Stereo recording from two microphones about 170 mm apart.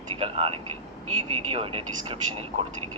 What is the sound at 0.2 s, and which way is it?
Speech, 35° right (ahead or behind).